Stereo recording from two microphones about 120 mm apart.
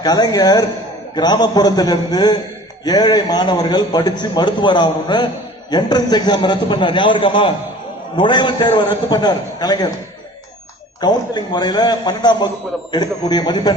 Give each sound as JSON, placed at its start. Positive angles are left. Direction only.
{"t": 0.0, "sound": "a man's voice", "side_deg": 30}
{"t": 11.0, "sound": "a man's voice", "side_deg": 35}